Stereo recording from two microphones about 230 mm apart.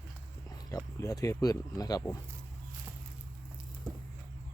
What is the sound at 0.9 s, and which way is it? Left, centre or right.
Speech, centre.